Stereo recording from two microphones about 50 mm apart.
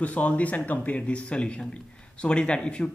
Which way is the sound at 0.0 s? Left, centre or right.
Left.